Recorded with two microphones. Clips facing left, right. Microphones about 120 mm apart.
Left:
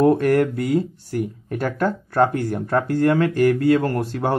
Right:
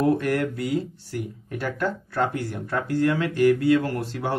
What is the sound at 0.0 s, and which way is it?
Speech, 45° left (ahead or behind).